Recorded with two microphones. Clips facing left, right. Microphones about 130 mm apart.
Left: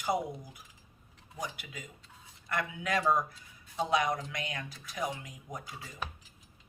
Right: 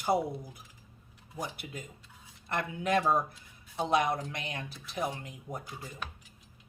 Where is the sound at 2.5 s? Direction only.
30° right (ahead or behind).